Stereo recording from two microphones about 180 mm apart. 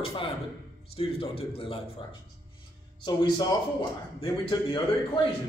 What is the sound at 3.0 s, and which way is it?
A man's voice, 25° left (ahead or behind).